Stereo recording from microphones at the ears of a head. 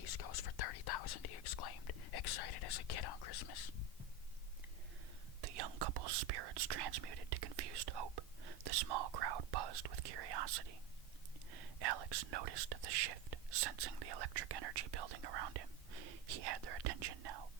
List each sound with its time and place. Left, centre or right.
0.0 s whispering: left
5.4 s whispering: right